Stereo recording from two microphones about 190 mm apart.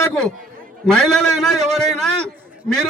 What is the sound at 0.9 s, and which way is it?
A man's voice, centre (ahead or behind).